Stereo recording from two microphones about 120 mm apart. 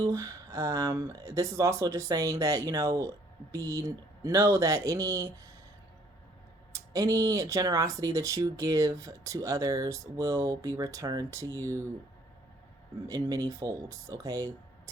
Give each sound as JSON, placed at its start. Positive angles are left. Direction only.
{"t": 0.0, "sound": "speech", "side_deg": -25}
{"t": 6.7, "sound": "speech", "side_deg": -30}
{"t": 13.1, "sound": "speech", "side_deg": -30}